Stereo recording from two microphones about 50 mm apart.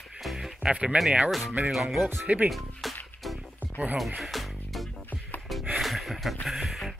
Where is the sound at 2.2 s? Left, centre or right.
Right.